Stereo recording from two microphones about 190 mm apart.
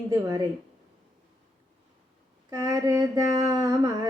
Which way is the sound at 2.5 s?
20° right (ahead or behind).